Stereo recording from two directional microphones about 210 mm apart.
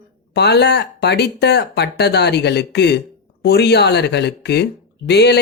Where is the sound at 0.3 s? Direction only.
50° left (ahead or behind).